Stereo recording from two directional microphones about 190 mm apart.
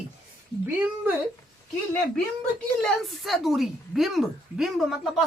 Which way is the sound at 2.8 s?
Centre (ahead or behind).